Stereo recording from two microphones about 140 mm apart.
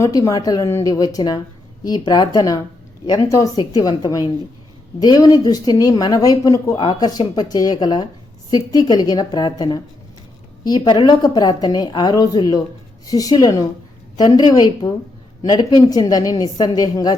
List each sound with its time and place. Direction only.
0.0 s a woman's voice: 25° left (ahead or behind)
15.9 s a woman's voice: 25° left (ahead or behind)